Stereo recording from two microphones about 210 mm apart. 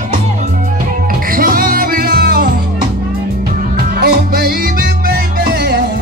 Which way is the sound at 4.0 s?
45° right (ahead or behind).